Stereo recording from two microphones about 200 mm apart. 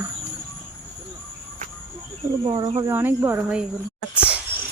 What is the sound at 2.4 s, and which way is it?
Speech, 25° right (ahead or behind).